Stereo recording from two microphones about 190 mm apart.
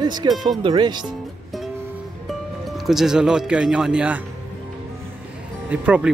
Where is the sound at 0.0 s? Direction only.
20° right (ahead or behind).